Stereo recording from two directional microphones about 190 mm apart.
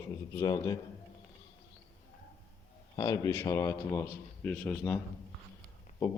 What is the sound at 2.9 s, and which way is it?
Speech, 20° left (ahead or behind).